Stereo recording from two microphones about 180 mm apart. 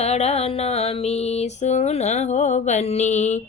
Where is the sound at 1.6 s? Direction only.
40° left (ahead or behind).